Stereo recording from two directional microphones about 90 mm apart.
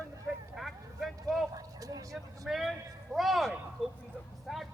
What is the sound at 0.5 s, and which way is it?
Vehicle, centre (ahead or behind).